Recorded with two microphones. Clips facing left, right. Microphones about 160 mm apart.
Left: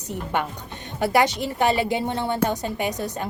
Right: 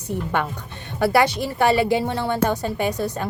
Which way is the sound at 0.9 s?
15° left (ahead or behind).